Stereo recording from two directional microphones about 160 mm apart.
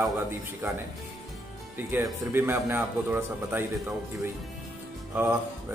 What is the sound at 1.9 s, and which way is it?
Speech, 15° right (ahead or behind).